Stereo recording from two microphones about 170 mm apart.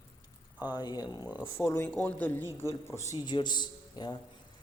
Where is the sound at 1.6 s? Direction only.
15° left (ahead or behind).